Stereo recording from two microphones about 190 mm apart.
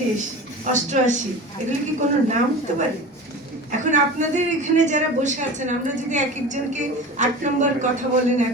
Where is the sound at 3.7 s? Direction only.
40° right (ahead or behind).